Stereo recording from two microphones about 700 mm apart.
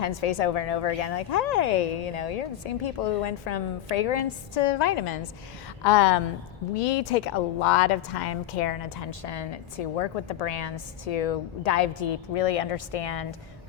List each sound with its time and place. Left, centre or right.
0.0 s a woman's voice: left
4.7 s a woman's voice: left
5.8 s a woman's voice: left